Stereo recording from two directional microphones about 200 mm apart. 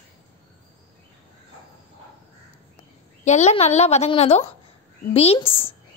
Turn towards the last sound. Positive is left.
turn(degrees=25)  # may be behind; listen again after turning